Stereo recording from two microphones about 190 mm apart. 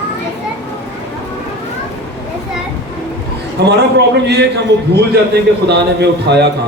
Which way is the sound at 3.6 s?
60° right (ahead or behind).